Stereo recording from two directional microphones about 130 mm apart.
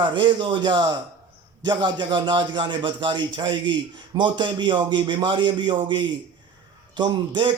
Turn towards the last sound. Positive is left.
turn(degrees=-40)  # may be behind; listen again after turning